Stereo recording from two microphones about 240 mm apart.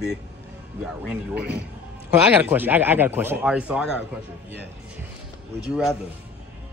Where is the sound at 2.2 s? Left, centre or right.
Centre.